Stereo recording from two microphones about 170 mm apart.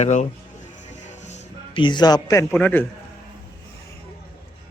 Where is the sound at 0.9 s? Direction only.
45° left (ahead or behind).